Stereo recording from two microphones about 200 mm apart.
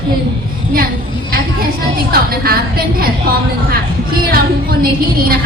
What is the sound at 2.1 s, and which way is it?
Speech, 50° right (ahead or behind).